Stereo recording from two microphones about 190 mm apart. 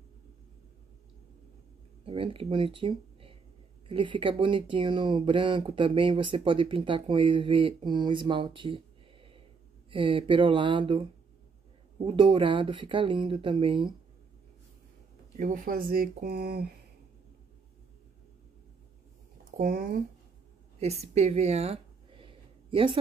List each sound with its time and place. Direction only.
2.0 s speech: 30° right (ahead or behind)
15.3 s speech: 45° right (ahead or behind)
19.5 s speech: 50° right (ahead or behind)
20.8 s a sound: 35° right (ahead or behind)